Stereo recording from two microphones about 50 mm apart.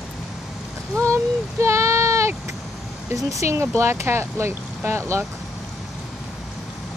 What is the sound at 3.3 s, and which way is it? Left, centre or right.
Speech, right.